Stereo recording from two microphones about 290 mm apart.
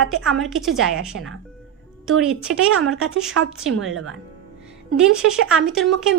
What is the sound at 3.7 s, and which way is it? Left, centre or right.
Speech, right.